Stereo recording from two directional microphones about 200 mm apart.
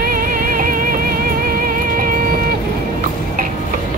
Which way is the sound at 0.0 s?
45° right (ahead or behind).